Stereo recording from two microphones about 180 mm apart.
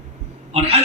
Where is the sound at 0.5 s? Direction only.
35° right (ahead or behind).